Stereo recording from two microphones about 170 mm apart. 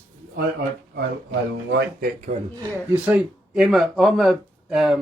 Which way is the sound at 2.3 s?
50° right (ahead or behind).